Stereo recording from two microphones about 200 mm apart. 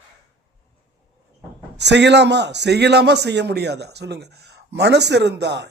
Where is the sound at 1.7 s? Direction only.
60° right (ahead or behind).